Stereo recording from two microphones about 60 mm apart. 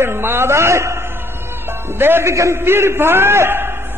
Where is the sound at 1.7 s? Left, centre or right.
Right.